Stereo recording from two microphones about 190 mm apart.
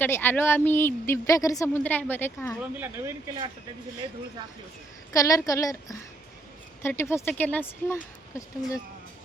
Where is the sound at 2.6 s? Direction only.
10° right (ahead or behind).